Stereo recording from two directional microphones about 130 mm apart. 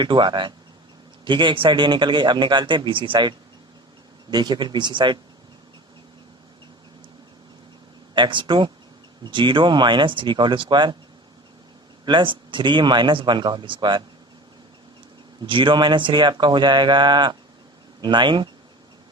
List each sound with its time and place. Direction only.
0.0 s a man's voice: 35° right (ahead or behind)
8.1 s a man's voice: 35° right (ahead or behind)
12.0 s a man's voice: 40° right (ahead or behind)
15.4 s a man's voice: 40° right (ahead or behind)